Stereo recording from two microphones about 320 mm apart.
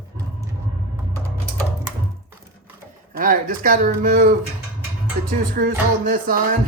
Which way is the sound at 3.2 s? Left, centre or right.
Right.